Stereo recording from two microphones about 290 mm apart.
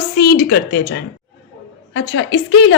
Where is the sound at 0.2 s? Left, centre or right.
Left.